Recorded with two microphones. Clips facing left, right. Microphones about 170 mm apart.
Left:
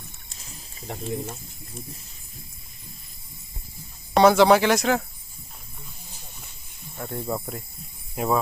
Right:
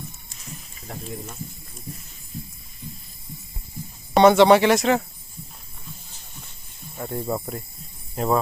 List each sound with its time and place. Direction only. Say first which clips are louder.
0.8 s speech: left 5 dB; 30° left (ahead or behind)
4.1 s speech: right 2 dB; centre (ahead or behind)
6.9 s speech: right 2 dB; 5° right (ahead or behind)
8.1 s speech: right 2 dB; 5° left (ahead or behind)